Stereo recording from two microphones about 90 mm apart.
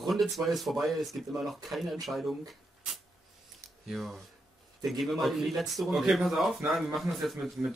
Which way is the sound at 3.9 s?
Centre (ahead or behind).